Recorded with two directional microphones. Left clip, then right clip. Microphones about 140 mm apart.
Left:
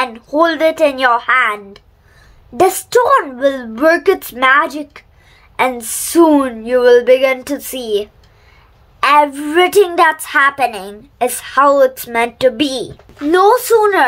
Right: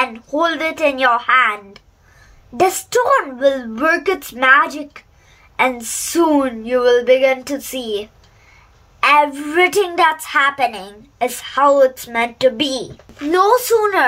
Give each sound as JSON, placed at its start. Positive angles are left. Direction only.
{"t": 0.0, "sound": "a woman's voice", "side_deg": 35}
{"t": 13.3, "sound": "speech", "side_deg": 25}